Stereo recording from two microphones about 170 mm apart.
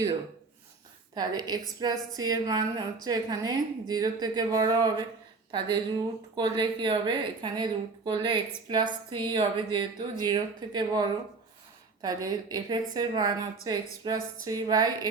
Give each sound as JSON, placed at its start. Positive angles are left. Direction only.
{"t": 1.1, "sound": "a woman's voice", "side_deg": -25}
{"t": 12.0, "sound": "a woman's voice", "side_deg": -25}